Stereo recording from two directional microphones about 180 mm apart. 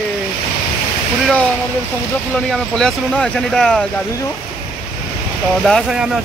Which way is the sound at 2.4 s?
5° left (ahead or behind).